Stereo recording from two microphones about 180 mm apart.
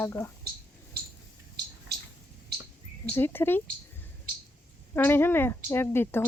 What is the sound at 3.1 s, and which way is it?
Speech, 10° left (ahead or behind).